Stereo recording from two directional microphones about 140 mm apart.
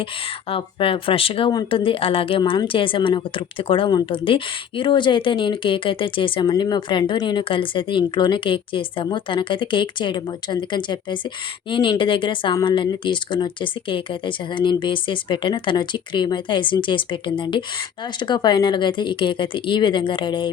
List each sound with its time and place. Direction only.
0.5 s speech: 40° left (ahead or behind)